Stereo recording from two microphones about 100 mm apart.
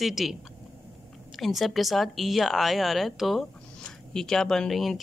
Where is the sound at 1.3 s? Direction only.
Centre (ahead or behind).